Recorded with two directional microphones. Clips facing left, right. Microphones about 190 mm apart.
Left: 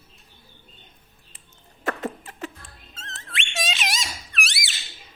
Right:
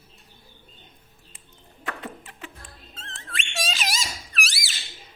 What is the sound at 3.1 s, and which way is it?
Squeak, centre (ahead or behind).